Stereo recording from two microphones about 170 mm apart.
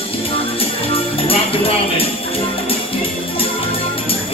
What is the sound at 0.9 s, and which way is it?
Music, 35° left (ahead or behind).